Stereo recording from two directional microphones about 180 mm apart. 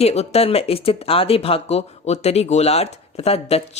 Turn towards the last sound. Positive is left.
turn(degrees=35)  # may be behind; listen again after turning